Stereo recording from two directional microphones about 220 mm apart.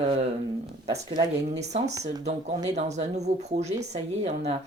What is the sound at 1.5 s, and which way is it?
Speech, 30° right (ahead or behind).